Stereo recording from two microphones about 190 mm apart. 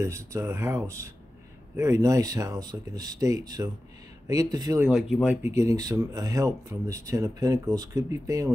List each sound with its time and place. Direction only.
0.0 s speech: 15° right (ahead or behind)
4.8 s speech: centre (ahead or behind)